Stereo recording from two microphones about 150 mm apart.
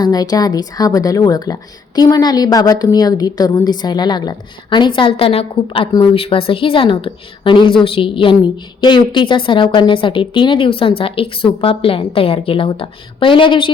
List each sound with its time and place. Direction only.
0.0 s a woman's voice: 25° left (ahead or behind)